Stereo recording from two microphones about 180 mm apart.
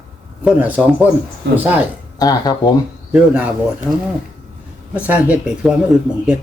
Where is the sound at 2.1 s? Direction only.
20° left (ahead or behind).